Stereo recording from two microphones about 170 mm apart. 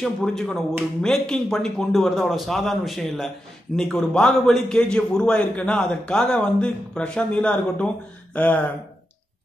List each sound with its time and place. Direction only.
0.0 s a man's voice: 5° left (ahead or behind)